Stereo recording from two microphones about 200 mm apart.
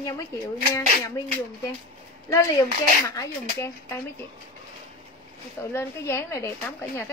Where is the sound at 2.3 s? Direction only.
15° left (ahead or behind).